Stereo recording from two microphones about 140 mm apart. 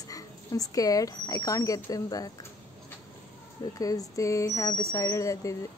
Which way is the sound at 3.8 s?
25° left (ahead or behind).